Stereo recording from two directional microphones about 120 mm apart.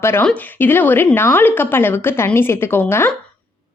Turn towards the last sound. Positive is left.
turn(degrees=20)  # may be behind; listen again after turning